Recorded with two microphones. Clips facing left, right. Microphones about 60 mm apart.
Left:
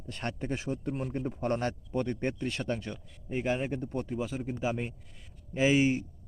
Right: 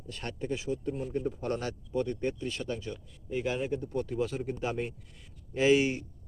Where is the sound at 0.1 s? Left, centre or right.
Left.